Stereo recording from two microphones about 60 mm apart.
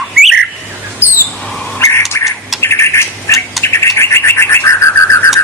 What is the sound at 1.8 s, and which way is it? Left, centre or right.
Bird, left.